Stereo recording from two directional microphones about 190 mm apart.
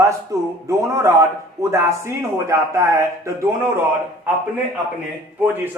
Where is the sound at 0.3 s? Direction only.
15° right (ahead or behind).